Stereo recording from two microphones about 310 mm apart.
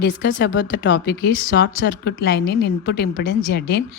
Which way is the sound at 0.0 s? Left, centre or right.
Left.